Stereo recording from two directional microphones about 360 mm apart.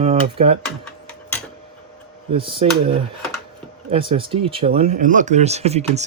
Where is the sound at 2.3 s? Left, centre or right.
Centre.